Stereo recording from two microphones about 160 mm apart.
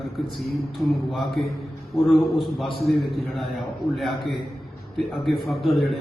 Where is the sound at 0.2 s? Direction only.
Centre (ahead or behind).